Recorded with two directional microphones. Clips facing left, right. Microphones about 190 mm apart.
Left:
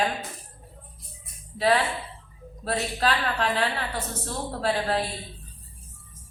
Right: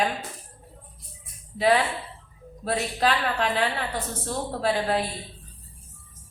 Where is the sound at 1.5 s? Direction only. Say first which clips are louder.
Right 1 dB; 15° right (ahead or behind).